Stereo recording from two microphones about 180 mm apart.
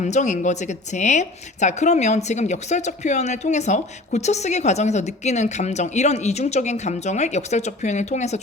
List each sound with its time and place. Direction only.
0.0 s a woman's voice: 40° left (ahead or behind)